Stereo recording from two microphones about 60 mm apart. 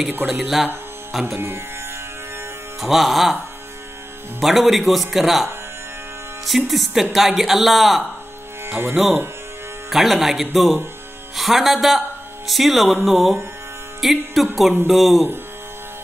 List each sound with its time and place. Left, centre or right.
0.3 s speech: centre
2.8 s speech: centre
4.4 s speech: centre
8.6 s speech: right
9.8 s speech: centre